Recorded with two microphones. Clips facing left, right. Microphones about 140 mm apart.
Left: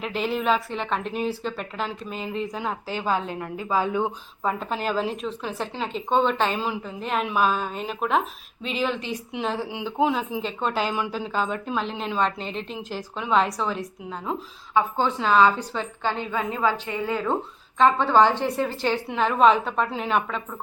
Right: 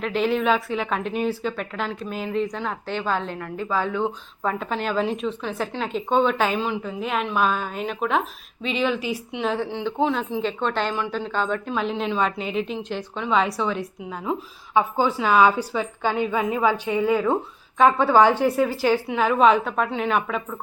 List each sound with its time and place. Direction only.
0.0 s speech: centre (ahead or behind)
4.6 s speech: centre (ahead or behind)
14.7 s a woman's voice: 15° right (ahead or behind)